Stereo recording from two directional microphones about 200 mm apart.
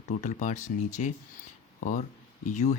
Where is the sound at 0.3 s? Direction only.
40° left (ahead or behind).